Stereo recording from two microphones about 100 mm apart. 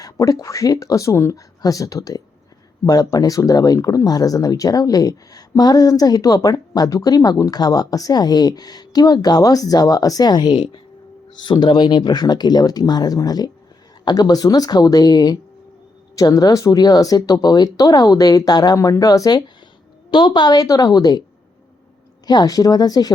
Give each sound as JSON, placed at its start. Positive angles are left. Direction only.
{"t": 0.0, "sound": "speech", "side_deg": 35}
{"t": 20.1, "sound": "speech", "side_deg": 50}
{"t": 22.3, "sound": "speech", "side_deg": 40}